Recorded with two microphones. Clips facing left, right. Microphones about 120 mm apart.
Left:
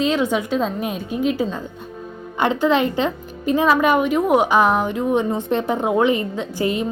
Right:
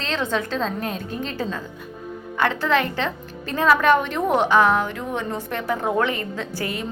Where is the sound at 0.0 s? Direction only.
10° left (ahead or behind).